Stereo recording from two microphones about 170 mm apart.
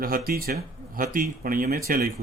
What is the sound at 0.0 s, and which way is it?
A man's voice, 60° right (ahead or behind).